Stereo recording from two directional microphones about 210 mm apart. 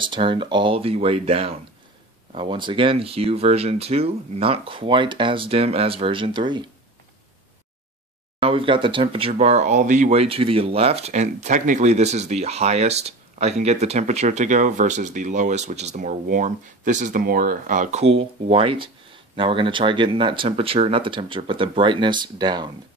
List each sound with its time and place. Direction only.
0.0 s speech: 25° right (ahead or behind)
8.4 s speech: 25° right (ahead or behind)